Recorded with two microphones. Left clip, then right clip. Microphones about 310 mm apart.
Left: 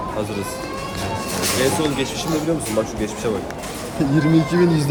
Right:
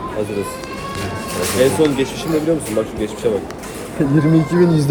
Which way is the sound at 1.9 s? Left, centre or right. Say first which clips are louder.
Right 3 dB; centre.